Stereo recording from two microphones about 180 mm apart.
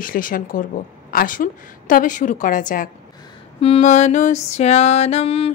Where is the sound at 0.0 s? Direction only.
50° left (ahead or behind).